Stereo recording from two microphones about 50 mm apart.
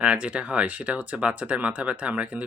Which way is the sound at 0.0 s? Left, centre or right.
Right.